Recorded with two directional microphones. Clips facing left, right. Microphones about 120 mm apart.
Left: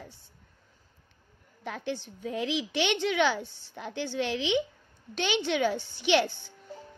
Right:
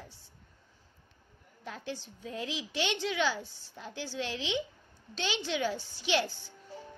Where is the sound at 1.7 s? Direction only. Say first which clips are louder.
Left 6 dB; 65° left (ahead or behind).